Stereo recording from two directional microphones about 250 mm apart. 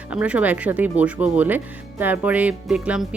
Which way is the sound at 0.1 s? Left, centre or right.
Centre.